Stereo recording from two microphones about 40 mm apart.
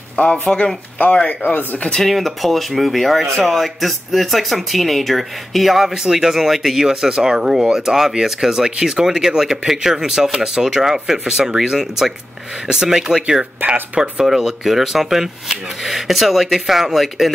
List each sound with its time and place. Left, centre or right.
0.1 s speech: left
1.4 s speech: left
2.0 s speech: centre
6.0 s speech: centre